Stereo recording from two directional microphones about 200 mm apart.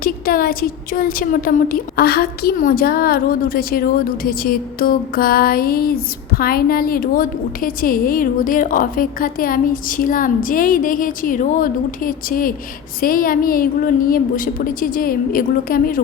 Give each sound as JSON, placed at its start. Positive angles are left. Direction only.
{"t": 0.0, "sound": "a woman's voice", "side_deg": 45}